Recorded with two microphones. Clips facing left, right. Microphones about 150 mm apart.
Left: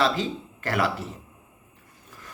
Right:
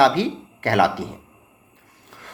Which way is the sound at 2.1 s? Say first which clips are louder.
Right 3 dB; 75° right (ahead or behind).